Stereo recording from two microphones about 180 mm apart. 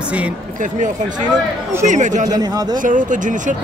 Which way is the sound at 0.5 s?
45° right (ahead or behind).